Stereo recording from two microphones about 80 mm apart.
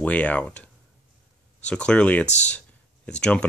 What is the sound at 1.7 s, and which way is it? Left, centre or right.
Speech, centre.